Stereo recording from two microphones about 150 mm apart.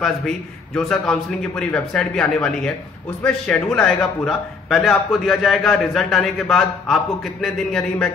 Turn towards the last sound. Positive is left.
turn(degrees=0)  # may be behind; listen again after turning